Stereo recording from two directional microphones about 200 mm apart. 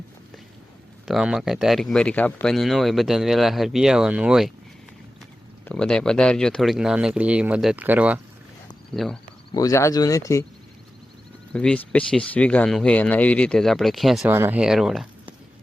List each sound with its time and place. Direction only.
1.0 s speech: centre (ahead or behind)
5.6 s speech: 5° left (ahead or behind)
9.5 s speech: 20° left (ahead or behind)
11.5 s speech: 5° left (ahead or behind)
14.3 s speech: 10° right (ahead or behind)